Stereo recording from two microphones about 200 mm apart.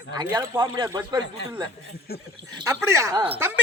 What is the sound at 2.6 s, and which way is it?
A man's voice, 15° right (ahead or behind).